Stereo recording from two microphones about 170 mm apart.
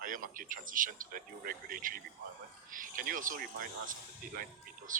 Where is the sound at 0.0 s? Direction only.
55° right (ahead or behind).